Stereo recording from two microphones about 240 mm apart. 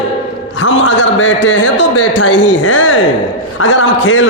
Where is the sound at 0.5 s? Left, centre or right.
Left.